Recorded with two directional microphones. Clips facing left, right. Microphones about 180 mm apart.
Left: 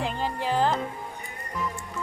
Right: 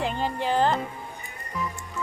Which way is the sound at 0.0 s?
Centre (ahead or behind).